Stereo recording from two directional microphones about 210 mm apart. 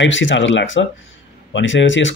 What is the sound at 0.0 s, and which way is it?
Speech, 65° left (ahead or behind).